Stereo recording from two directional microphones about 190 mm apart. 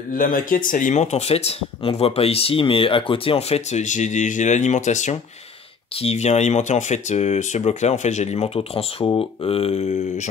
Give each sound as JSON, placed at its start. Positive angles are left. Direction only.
{"t": 0.1, "sound": "speech", "side_deg": 45}